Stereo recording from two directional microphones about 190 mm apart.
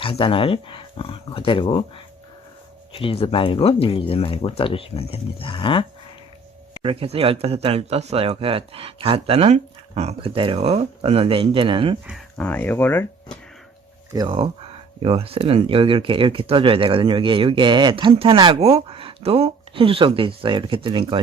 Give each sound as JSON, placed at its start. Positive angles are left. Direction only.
{"t": 0.0, "sound": "speech", "side_deg": 30}
{"t": 2.9, "sound": "speech", "side_deg": 30}
{"t": 6.8, "sound": "speech", "side_deg": -30}
{"t": 12.4, "sound": "speech", "side_deg": 10}
{"t": 14.1, "sound": "speech", "side_deg": -25}